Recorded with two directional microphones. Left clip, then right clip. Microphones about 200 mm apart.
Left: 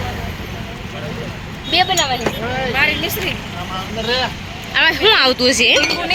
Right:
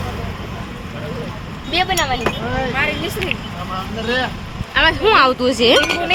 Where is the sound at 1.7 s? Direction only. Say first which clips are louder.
Left 2 dB; 10° left (ahead or behind).